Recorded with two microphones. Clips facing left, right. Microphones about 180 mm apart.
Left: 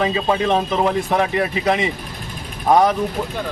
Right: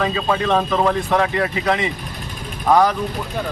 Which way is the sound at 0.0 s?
20° left (ahead or behind).